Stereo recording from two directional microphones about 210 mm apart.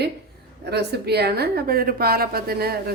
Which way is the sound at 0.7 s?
50° right (ahead or behind).